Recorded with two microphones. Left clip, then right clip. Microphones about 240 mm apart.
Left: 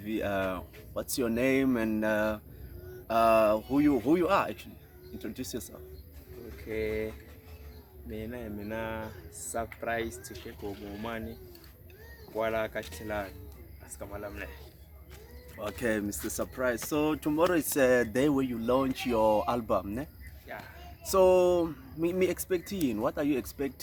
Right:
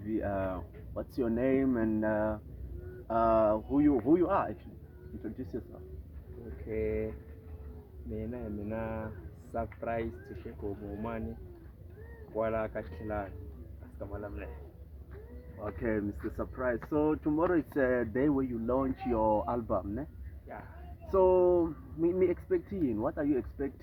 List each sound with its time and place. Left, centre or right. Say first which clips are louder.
0.0 s speech: left 2 dB; left
6.7 s speech: left 1 dB; centre
8.1 s speech: even; centre
12.4 s speech: left 2 dB; centre
15.8 s speech: left 2 dB; left
21.1 s speech: left 2 dB; left